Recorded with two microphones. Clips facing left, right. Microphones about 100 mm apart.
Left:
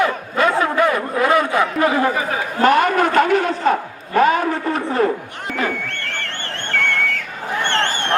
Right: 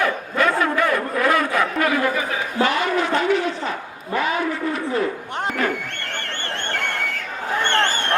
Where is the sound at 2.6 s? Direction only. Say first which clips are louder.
Left 7 dB; 50° left (ahead or behind).